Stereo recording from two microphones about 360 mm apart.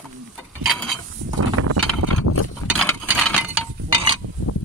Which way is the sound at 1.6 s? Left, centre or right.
Right.